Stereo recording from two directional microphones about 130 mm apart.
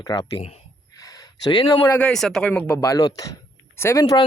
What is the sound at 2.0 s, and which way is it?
Speech, 5° left (ahead or behind).